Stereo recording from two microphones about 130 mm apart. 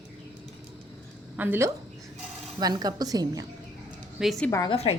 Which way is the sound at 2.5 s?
30° right (ahead or behind).